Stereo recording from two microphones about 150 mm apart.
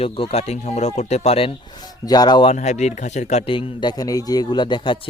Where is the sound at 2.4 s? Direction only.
50° left (ahead or behind); by 4.9 s 30° left (ahead or behind).